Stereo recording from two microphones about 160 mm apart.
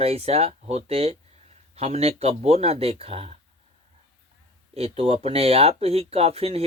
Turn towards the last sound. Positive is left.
turn(degrees=-40)  # may be behind; listen again after turning